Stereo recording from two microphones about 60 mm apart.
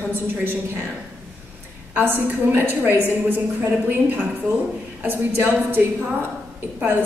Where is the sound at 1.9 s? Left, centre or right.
Right.